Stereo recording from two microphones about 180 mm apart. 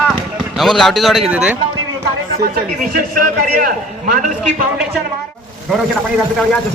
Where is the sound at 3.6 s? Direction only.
50° right (ahead or behind).